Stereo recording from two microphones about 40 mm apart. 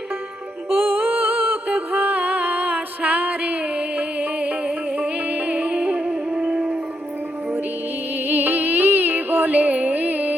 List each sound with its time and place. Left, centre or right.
0.7 s music: right
8.3 s music: right